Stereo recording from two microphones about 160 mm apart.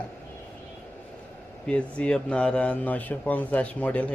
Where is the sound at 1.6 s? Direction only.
5° left (ahead or behind).